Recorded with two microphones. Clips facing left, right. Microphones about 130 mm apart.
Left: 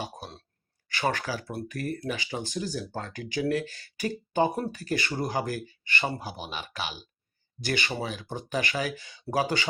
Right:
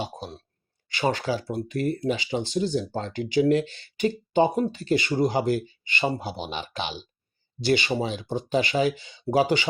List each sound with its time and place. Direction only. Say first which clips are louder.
0.0 s speech: right 4 dB; 20° right (ahead or behind)